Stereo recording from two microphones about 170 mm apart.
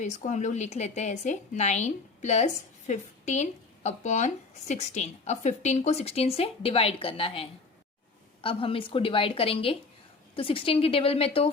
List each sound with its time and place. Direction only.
0.0 s a woman's voice: 45° left (ahead or behind)